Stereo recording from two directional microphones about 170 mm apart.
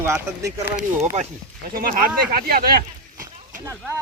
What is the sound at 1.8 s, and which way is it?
Speech, 55° right (ahead or behind).